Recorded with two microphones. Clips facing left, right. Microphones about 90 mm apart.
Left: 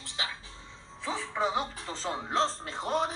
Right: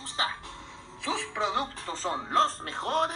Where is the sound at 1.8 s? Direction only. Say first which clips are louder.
Right 2 dB; 40° right (ahead or behind).